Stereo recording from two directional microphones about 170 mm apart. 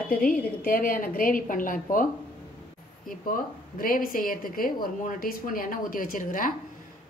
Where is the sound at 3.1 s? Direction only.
60° left (ahead or behind).